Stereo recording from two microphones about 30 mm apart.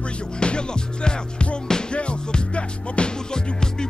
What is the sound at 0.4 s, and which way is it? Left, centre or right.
Music, left.